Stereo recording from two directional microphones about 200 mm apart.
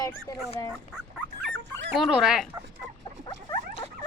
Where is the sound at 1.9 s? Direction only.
Centre (ahead or behind).